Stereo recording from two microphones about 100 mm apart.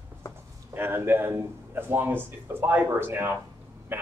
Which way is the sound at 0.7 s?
20° right (ahead or behind).